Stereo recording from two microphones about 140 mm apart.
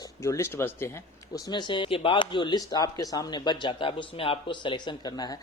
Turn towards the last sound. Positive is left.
turn(degrees=30)  # may be behind; listen again after turning